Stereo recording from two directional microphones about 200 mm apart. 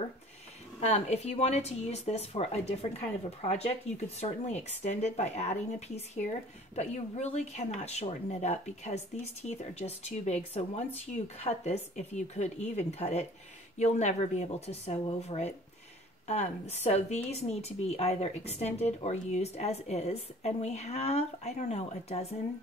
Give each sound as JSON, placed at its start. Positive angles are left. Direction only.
{"t": 0.7, "sound": "a woman's voice", "side_deg": 35}